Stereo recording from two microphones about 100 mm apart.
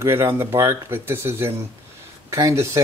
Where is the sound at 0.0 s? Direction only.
25° right (ahead or behind).